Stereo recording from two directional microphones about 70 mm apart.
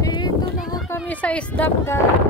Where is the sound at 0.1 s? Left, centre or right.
Left.